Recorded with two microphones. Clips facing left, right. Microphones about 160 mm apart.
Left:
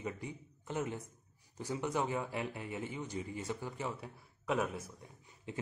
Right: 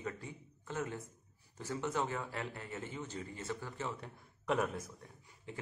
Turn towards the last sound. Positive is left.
turn(degrees=20)  # may be behind; listen again after turning